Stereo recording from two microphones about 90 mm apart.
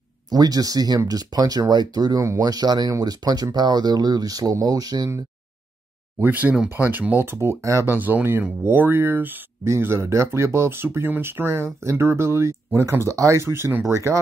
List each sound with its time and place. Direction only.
0.3 s speech: 45° right (ahead or behind)
6.1 s speech: 20° right (ahead or behind)